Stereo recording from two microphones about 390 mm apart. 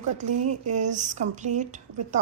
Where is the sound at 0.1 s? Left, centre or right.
Centre.